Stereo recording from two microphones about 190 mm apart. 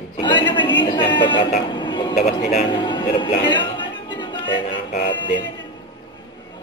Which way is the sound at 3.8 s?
25° left (ahead or behind).